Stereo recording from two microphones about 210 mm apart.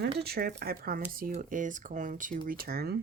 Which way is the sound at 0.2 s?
50° right (ahead or behind).